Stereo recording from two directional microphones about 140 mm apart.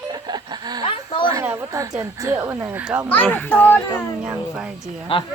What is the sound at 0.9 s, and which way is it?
Speech, 40° left (ahead or behind).